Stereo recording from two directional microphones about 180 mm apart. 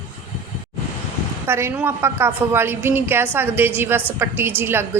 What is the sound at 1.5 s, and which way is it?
A woman's voice, 15° right (ahead or behind).